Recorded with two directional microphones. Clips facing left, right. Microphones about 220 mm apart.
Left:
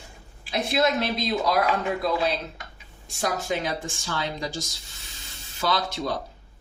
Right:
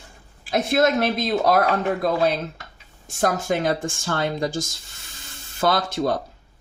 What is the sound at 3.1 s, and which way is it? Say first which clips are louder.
Speech: right 5 dB; 50° right (ahead or behind).